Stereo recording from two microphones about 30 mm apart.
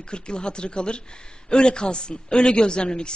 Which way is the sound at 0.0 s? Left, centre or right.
Left.